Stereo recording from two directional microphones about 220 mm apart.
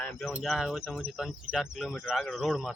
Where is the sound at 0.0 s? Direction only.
Centre (ahead or behind).